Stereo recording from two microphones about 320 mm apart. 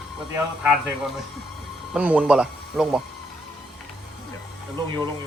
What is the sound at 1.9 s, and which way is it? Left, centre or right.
Speech, centre.